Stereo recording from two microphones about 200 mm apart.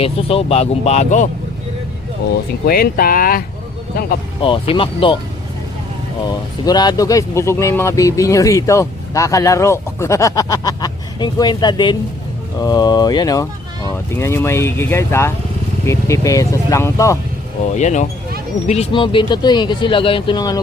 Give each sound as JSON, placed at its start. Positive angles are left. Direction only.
{"t": 0.0, "sound": "speech", "side_deg": 30}
{"t": 2.6, "sound": "speech", "side_deg": 50}
{"t": 4.4, "sound": "speech", "side_deg": 25}
{"t": 6.2, "sound": "speech", "side_deg": 20}
{"t": 17.7, "sound": "speech", "side_deg": 35}